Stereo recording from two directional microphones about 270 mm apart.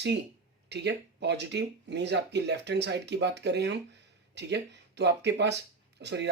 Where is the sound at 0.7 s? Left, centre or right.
Right.